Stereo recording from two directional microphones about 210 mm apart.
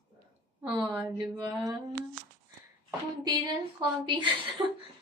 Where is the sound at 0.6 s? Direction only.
15° right (ahead or behind).